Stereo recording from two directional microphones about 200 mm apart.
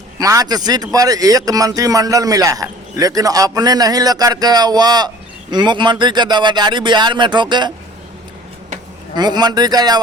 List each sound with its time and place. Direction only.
0.2 s speech: 15° right (ahead or behind)
9.1 s speech: 20° right (ahead or behind)